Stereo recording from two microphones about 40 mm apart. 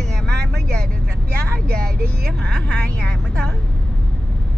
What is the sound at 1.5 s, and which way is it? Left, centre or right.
Vehicle, left.